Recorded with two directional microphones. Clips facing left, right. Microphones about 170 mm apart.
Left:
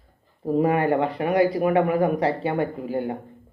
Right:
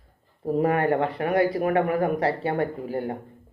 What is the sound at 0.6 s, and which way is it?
Speech, 25° left (ahead or behind).